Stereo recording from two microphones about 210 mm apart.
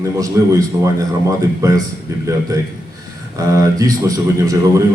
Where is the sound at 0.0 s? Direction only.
15° right (ahead or behind).